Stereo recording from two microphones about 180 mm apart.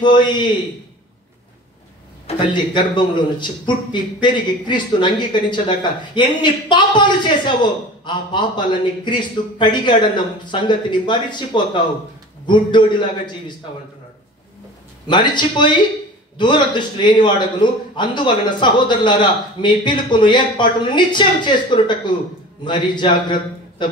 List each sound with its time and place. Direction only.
0.0 s speech: 25° left (ahead or behind)
2.2 s speech: 25° left (ahead or behind)
15.0 s speech: 25° left (ahead or behind)